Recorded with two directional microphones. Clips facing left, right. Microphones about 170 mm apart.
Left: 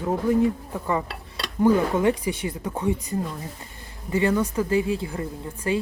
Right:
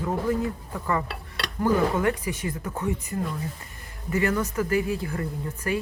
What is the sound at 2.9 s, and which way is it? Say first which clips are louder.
Speech: left 3 dB; 25° left (ahead or behind).